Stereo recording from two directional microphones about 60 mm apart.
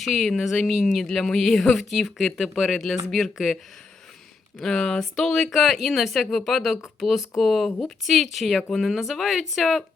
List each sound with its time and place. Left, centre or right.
0.0 s speech: centre
1.0 s speech: centre
4.6 s speech: centre